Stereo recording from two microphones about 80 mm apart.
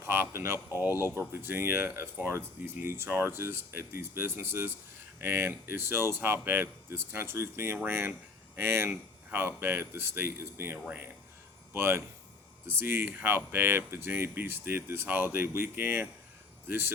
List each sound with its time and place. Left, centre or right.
0.0 s speech: right